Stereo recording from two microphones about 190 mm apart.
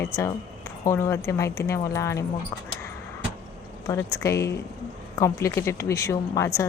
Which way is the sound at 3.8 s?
15° left (ahead or behind).